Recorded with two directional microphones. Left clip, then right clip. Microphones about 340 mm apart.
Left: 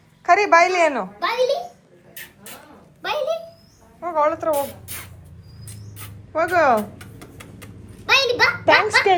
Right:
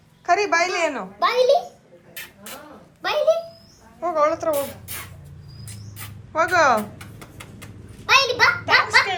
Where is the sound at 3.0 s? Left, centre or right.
Centre.